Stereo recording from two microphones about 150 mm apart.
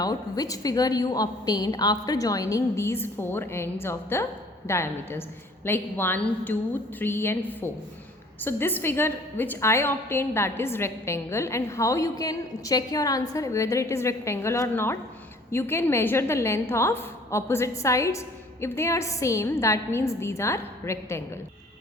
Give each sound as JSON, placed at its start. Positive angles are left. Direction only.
{"t": 0.0, "sound": "a woman's voice", "side_deg": 25}